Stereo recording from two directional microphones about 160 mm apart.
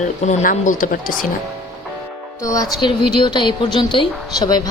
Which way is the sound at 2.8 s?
30° left (ahead or behind).